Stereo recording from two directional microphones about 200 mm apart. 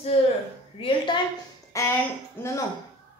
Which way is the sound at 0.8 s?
25° left (ahead or behind).